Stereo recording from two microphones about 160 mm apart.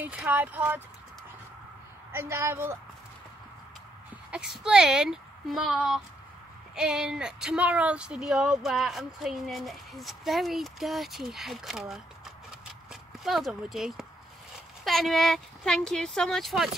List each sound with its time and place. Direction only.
0.0 s speech: 10° right (ahead or behind)
2.1 s speech: 15° right (ahead or behind)
4.3 s speech: 5° right (ahead or behind)
13.2 s speech: centre (ahead or behind)